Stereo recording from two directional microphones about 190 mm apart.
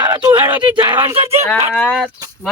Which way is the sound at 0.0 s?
20° right (ahead or behind).